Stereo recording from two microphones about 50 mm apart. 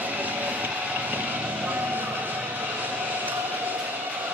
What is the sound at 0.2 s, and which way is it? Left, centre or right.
Vehicle, right.